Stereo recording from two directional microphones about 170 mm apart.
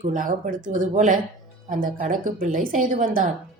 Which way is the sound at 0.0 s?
50° right (ahead or behind).